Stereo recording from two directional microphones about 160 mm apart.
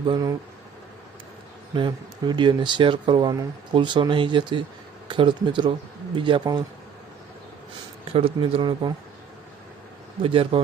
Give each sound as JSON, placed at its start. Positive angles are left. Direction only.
{"t": 0.0, "sound": "speech", "side_deg": -25}
{"t": 1.7, "sound": "speech", "side_deg": -30}
{"t": 8.1, "sound": "a man's voice", "side_deg": -35}
{"t": 10.2, "sound": "a man's voice", "side_deg": -35}